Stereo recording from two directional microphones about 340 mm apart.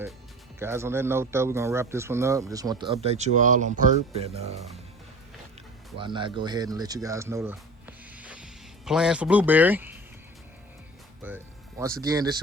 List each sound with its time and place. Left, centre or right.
0.6 s a man's voice: centre
6.0 s speech: centre
11.2 s speech: centre